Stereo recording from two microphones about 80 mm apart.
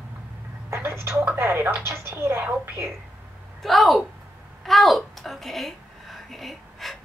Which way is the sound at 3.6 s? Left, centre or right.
Centre.